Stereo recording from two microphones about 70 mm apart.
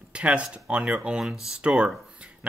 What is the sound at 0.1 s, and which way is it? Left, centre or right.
Speech, centre.